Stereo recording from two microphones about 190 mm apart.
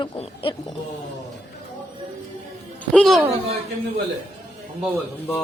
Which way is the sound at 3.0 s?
Centre (ahead or behind).